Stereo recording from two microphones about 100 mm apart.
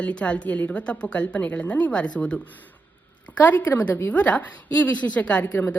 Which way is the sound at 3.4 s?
15° left (ahead or behind).